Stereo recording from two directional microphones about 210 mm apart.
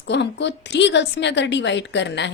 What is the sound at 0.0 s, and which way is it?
A woman's voice, 55° left (ahead or behind).